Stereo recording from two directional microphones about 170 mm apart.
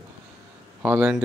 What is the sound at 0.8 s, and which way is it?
Speech, 10° right (ahead or behind).